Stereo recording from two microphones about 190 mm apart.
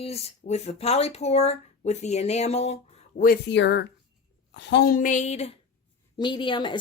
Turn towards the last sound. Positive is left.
turn(degrees=25)  # may be behind; listen again after turning